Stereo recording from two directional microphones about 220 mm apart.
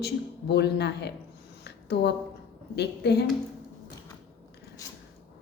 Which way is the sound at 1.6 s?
50° left (ahead or behind).